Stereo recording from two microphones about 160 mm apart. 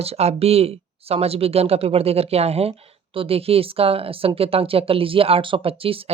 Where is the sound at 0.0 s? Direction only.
40° right (ahead or behind).